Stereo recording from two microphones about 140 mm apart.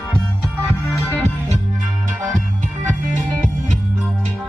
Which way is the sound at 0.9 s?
20° left (ahead or behind).